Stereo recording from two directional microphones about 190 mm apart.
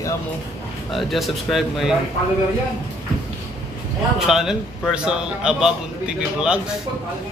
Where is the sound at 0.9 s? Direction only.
Centre (ahead or behind).